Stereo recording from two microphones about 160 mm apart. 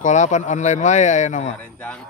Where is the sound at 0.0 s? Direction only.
50° left (ahead or behind).